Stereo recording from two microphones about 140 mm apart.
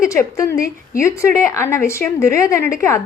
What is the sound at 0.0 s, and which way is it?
A woman's voice, 20° left (ahead or behind).